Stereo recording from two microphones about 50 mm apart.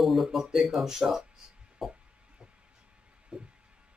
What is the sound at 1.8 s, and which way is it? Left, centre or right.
Music, centre.